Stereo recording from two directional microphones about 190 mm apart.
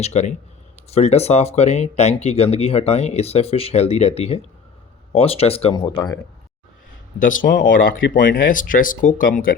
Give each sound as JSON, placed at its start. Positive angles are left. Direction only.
{"t": 0.0, "sound": "speech", "side_deg": 35}
{"t": 5.8, "sound": "speech", "side_deg": 20}
{"t": 7.2, "sound": "speech", "side_deg": 45}